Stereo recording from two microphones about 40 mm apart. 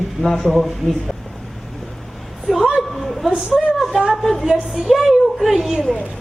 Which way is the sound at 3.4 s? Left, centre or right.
Centre.